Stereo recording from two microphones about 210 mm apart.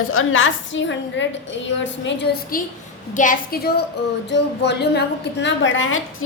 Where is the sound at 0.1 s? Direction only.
75° left (ahead or behind); by 2.6 s 50° left (ahead or behind).